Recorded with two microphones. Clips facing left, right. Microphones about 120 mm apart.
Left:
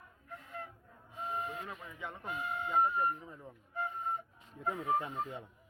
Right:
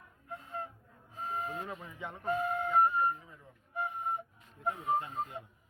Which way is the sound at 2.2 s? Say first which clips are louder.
Right 7 dB; 45° right (ahead or behind).